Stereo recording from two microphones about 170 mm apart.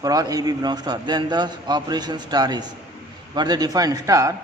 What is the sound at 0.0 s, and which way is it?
A man's voice, 20° right (ahead or behind).